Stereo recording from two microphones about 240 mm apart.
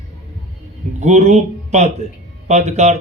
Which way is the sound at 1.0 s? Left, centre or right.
Right.